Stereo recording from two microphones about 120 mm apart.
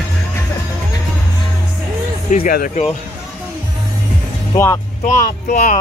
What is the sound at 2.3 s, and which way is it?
Music, 90° left.